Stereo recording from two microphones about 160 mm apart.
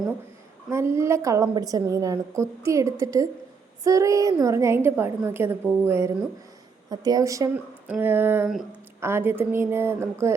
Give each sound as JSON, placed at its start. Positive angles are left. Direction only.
{"t": 0.7, "sound": "a woman's voice", "side_deg": -15}